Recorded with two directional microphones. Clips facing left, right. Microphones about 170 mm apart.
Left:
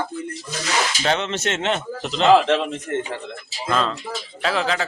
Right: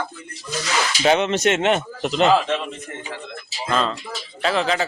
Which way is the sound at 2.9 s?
70° left (ahead or behind).